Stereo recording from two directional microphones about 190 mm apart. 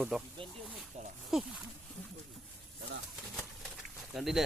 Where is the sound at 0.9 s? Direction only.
35° right (ahead or behind).